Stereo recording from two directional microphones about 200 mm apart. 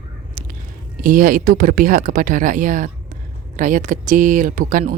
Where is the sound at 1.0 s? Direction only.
45° right (ahead or behind).